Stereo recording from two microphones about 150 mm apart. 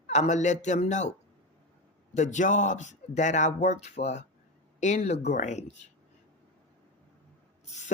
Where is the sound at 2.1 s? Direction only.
55° left (ahead or behind).